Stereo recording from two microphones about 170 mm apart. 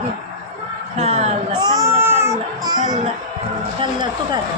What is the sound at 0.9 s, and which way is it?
Speech, 40° right (ahead or behind).